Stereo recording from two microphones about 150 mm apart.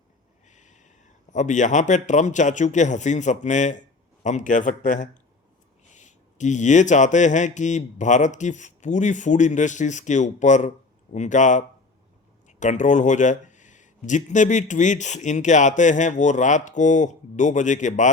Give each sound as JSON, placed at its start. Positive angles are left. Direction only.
{"t": 0.4, "sound": "a man's voice", "side_deg": 55}